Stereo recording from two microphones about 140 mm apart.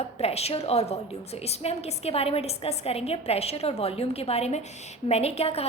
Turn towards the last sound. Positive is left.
turn(degrees=45)  # may be behind; listen again after turning